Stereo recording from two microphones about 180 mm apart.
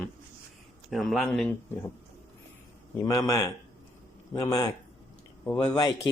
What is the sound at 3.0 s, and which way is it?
Speech, 20° left (ahead or behind).